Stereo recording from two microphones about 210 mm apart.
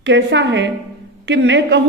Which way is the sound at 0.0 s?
60° right (ahead or behind).